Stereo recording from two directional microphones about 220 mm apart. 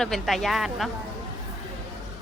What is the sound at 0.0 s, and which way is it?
Speech, centre (ahead or behind).